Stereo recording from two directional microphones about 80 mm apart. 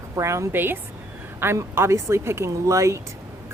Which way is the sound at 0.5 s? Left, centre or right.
Right.